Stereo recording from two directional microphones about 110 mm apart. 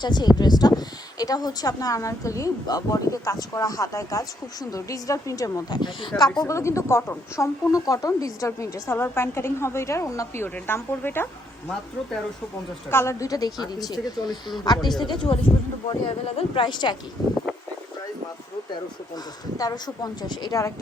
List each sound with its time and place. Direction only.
0.0 s speech: 40° left (ahead or behind)
6.5 s a woman's voice: 25° left (ahead or behind)
12.9 s speech: 25° left (ahead or behind); by 15.3 s 45° left (ahead or behind)
15.9 s speech: 55° left (ahead or behind)
16.6 s speech: 40° left (ahead or behind)
17.2 s a sound: 35° left (ahead or behind)
18.7 s speech: 35° left (ahead or behind)